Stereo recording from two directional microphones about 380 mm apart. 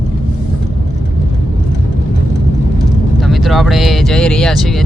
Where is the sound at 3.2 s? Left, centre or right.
Centre.